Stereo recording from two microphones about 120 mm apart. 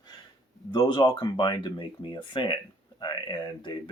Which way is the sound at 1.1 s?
40° left (ahead or behind).